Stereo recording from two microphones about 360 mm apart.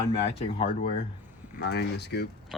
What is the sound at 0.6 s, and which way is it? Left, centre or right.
Speech, centre.